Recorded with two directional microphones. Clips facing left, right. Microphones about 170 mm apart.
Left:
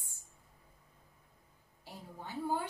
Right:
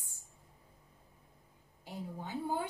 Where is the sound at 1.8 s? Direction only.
15° right (ahead or behind).